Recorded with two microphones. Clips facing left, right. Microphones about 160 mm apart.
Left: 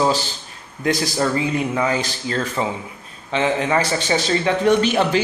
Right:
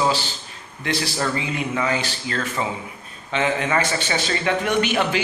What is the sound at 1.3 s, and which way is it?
Speech, 35° left (ahead or behind).